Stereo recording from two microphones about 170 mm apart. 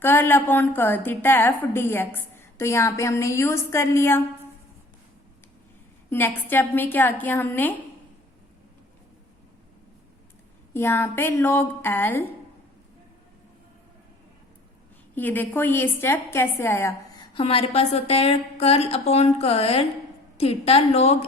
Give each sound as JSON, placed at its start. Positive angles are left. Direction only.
{"t": 0.0, "sound": "a woman's voice", "side_deg": 10}
{"t": 6.1, "sound": "a woman's voice", "side_deg": 10}
{"t": 10.8, "sound": "a woman's voice", "side_deg": 15}
{"t": 15.1, "sound": "a woman's voice", "side_deg": 10}
{"t": 17.3, "sound": "a woman's voice", "side_deg": 35}